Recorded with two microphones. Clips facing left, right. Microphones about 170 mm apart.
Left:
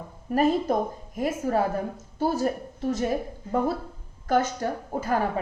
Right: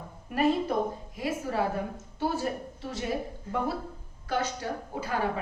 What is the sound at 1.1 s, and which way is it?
A woman's voice, 45° left (ahead or behind).